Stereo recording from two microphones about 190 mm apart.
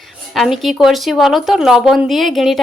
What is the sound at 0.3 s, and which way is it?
Speech, centre (ahead or behind).